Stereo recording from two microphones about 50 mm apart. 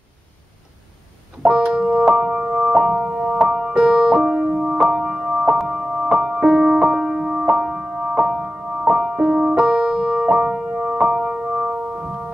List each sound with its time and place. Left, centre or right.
1.4 s music: centre
6.4 s music: centre
9.2 s music: centre